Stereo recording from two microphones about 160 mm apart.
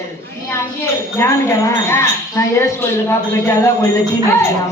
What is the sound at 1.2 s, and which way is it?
A woman's voice, 15° left (ahead or behind).